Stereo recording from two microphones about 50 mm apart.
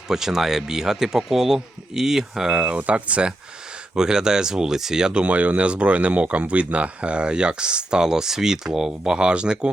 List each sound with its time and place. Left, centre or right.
0.1 s speech: centre
2.6 s speech: right; by 8.9 s centre
8.9 s speech: centre